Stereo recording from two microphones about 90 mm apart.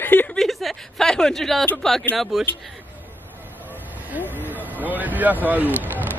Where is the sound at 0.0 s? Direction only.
20° left (ahead or behind).